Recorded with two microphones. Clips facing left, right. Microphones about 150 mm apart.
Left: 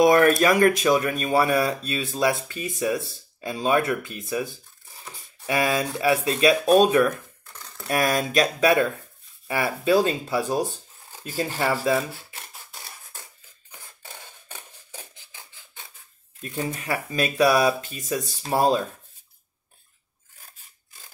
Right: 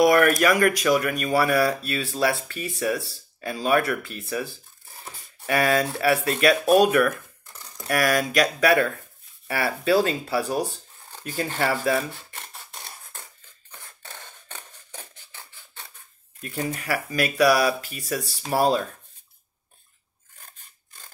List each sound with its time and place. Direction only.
0.0 s speech: 25° left (ahead or behind)
12.1 s a sound: 5° left (ahead or behind)
13.7 s mechanisms: 10° left (ahead or behind)
16.3 s speech: 25° left (ahead or behind)
20.3 s scrape: 5° left (ahead or behind)